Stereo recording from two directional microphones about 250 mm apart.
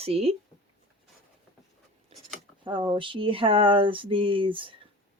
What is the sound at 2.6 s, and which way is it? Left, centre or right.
Speech, centre.